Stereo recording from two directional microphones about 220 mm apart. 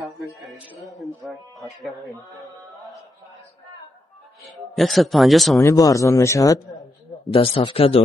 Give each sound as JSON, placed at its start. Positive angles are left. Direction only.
{"t": 0.4, "sound": "a man's voice", "side_deg": 0}
{"t": 4.5, "sound": "a man's voice", "side_deg": 0}
{"t": 5.6, "sound": "a man's voice", "side_deg": 15}